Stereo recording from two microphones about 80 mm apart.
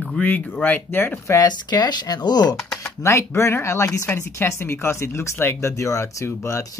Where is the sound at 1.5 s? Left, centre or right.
Left.